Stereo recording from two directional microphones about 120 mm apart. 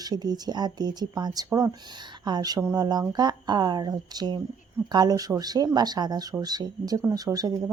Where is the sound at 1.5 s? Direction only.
20° right (ahead or behind).